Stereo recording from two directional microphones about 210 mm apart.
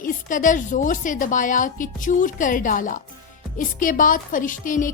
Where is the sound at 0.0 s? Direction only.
40° left (ahead or behind).